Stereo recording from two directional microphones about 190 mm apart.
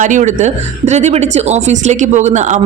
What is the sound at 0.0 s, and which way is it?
A woman's voice, 40° right (ahead or behind).